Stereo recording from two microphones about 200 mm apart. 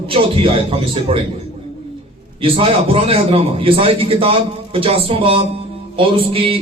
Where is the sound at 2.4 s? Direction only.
30° right (ahead or behind).